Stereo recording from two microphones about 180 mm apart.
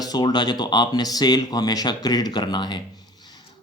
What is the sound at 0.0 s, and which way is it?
Speech, 20° left (ahead or behind).